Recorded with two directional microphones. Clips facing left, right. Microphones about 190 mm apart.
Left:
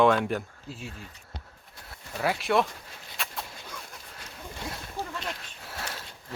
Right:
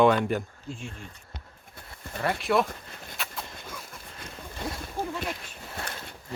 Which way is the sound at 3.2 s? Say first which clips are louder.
Left 1 dB; centre (ahead or behind).